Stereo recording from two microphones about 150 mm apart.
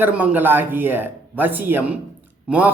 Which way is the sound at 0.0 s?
10° right (ahead or behind).